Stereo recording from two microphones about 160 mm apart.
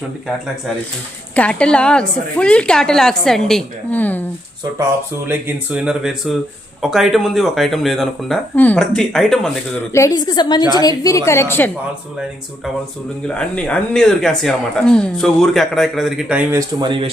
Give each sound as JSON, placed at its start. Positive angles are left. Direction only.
{"t": 1.4, "sound": "speech", "side_deg": 5}
{"t": 5.3, "sound": "speech", "side_deg": -10}
{"t": 9.9, "sound": "a woman's voice", "side_deg": 20}
{"t": 13.2, "sound": "speech", "side_deg": 5}
{"t": 16.8, "sound": "speech", "side_deg": -30}